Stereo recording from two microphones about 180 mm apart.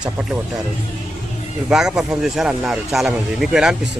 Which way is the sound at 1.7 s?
5° right (ahead or behind).